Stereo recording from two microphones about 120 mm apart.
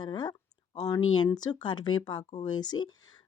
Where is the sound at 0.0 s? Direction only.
35° left (ahead or behind).